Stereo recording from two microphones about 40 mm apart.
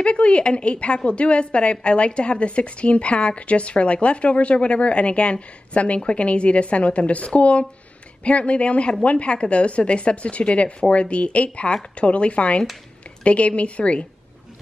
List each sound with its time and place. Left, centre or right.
0.0 s a woman's voice: left